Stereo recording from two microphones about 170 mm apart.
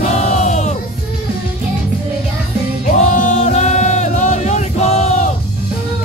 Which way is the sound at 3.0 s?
45° left (ahead or behind).